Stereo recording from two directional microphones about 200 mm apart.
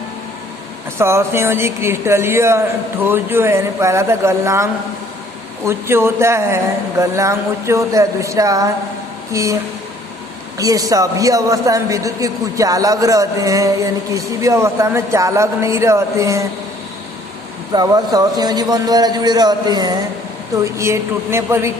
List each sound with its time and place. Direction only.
0.9 s a man's voice: 10° right (ahead or behind)
10.6 s a man's voice: 15° right (ahead or behind)
17.7 s a man's voice: 20° right (ahead or behind)